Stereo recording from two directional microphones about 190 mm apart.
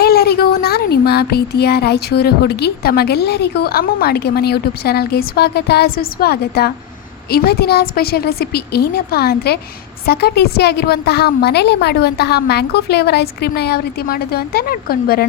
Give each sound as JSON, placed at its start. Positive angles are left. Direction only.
{"t": 0.0, "sound": "speech", "side_deg": 55}